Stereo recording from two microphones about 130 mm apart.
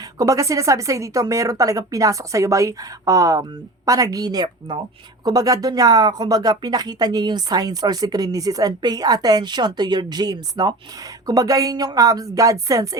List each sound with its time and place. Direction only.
0.2 s speech: 25° right (ahead or behind)